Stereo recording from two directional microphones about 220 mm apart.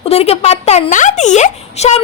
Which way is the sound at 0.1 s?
25° left (ahead or behind).